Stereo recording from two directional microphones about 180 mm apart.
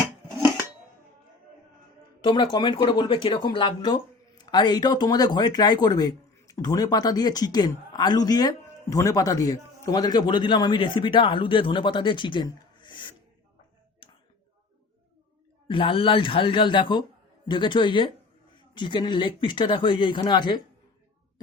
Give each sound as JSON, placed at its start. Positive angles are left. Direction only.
{"t": 2.2, "sound": "speech", "side_deg": 25}
{"t": 15.6, "sound": "speech", "side_deg": 30}